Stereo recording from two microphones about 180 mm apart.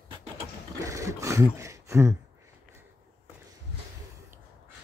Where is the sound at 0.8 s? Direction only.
20° right (ahead or behind).